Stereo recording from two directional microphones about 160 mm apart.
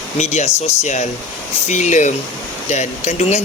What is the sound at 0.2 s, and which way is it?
Speech, 45° left (ahead or behind).